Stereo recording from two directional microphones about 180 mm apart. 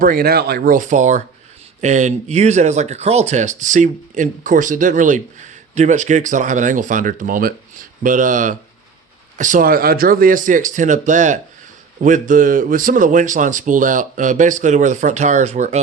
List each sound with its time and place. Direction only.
0.0 s speech: 55° right (ahead or behind)